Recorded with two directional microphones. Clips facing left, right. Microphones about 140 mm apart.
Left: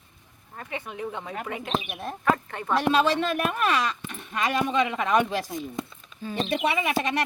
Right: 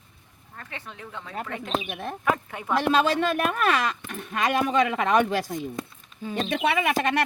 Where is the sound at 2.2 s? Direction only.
10° right (ahead or behind).